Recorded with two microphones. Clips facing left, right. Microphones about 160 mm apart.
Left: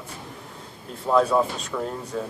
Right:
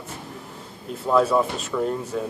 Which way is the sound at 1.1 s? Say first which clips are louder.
Right 1 dB; 5° right (ahead or behind).